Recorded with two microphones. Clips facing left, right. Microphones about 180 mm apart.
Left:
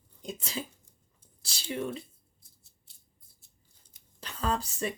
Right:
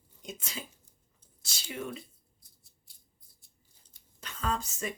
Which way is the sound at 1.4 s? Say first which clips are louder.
Left 5 dB; 30° left (ahead or behind).